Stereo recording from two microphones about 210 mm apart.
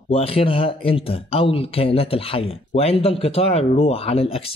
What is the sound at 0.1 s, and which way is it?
Speech, 25° left (ahead or behind).